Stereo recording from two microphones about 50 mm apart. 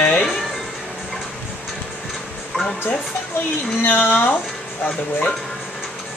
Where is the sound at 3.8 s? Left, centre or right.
Left.